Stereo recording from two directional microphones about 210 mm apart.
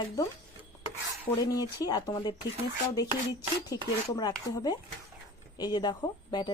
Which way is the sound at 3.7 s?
15° left (ahead or behind).